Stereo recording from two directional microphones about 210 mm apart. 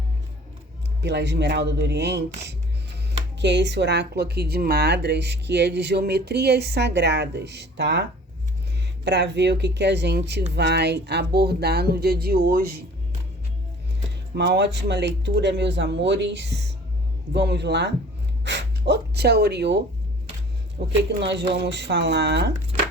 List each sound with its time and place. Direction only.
1.0 s speech: 55° right (ahead or behind)
9.0 s speech: 55° right (ahead or behind)
14.3 s speech: 55° right (ahead or behind)